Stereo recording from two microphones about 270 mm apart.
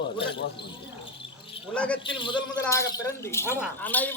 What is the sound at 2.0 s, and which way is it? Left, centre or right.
A man's voice, centre.